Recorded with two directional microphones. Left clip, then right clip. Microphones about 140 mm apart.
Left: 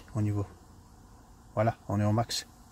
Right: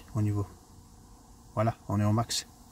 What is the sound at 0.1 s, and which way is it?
Speech, 5° right (ahead or behind).